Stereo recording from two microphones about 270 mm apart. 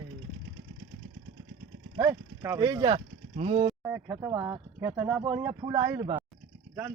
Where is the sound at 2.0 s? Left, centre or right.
Centre.